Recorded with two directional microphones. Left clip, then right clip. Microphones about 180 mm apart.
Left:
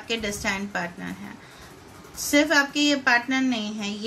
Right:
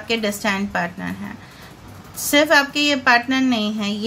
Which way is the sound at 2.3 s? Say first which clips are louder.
Right 5 dB; 25° right (ahead or behind).